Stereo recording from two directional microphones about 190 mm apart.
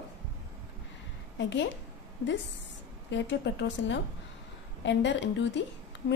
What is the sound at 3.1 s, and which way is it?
Speech, 70° left (ahead or behind).